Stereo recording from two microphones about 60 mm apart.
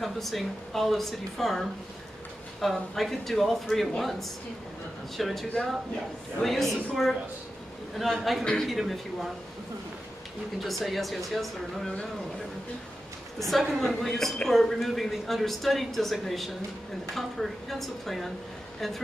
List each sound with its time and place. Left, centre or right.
0.0 s a woman's voice: centre
10.6 s a woman's voice: centre
13.4 s a woman's voice: centre